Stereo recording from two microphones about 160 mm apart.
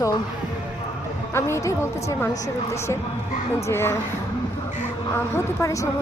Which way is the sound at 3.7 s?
15° left (ahead or behind).